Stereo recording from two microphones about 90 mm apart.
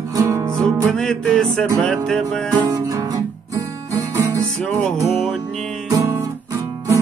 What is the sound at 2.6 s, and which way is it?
Music, 45° right (ahead or behind).